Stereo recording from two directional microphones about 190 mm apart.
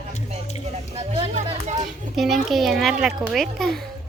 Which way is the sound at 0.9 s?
30° right (ahead or behind).